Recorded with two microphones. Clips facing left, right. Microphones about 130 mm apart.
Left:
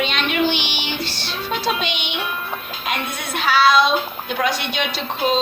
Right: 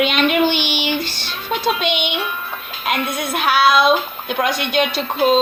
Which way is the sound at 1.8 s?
55° right (ahead or behind).